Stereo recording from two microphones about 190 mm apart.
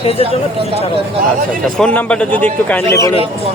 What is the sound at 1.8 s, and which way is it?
A man's voice, 5° left (ahead or behind).